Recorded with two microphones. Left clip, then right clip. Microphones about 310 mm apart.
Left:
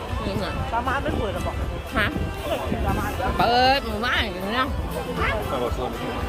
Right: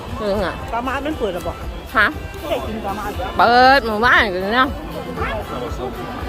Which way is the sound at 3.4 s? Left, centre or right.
Centre.